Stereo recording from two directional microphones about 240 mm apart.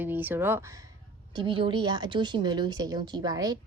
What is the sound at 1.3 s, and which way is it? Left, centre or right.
A woman's voice, right.